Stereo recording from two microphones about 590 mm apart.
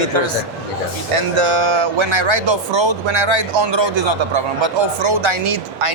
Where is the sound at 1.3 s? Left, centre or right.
Right.